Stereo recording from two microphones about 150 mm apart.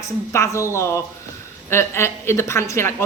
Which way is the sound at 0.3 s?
20° left (ahead or behind).